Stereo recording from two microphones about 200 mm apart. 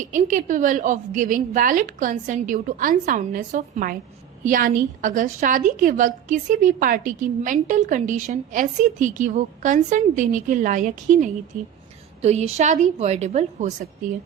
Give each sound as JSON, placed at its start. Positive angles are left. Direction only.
{"t": 0.0, "sound": "a woman's voice", "side_deg": -40}